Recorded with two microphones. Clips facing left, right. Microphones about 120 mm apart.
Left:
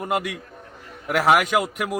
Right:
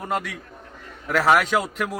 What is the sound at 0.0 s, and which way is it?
A man's voice, 10° left (ahead or behind).